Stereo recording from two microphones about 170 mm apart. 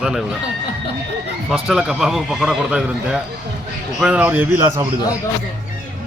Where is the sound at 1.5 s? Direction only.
5° right (ahead or behind).